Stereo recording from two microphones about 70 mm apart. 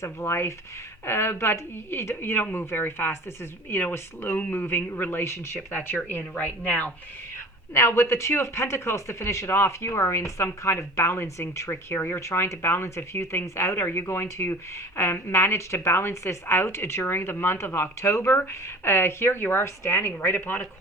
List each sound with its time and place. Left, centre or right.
0.0 s speech: left
7.7 s speech: left